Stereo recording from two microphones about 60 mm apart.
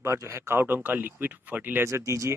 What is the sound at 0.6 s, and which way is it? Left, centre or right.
Speech, right.